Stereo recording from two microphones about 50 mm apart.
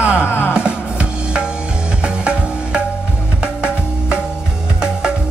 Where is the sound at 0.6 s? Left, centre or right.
Right.